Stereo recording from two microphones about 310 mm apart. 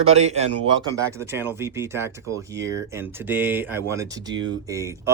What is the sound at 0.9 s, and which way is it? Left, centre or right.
Speech, centre.